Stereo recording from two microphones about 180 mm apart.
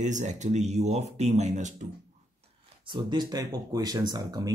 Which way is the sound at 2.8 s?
25° right (ahead or behind).